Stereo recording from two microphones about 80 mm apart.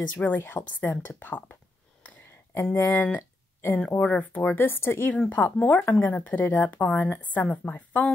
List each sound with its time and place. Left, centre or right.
0.1 s a woman's voice: left
2.0 s a sound: left
2.9 s a woman's voice: left